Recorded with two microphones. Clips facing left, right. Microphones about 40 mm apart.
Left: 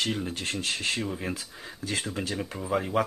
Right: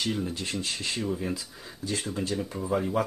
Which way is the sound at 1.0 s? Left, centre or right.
Left.